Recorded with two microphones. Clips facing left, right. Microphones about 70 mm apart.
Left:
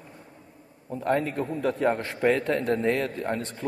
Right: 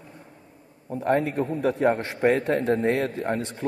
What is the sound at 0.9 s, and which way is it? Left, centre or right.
Speech, right.